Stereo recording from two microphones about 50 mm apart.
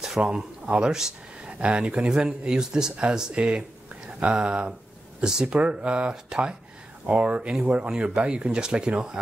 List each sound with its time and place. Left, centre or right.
0.2 s speech: centre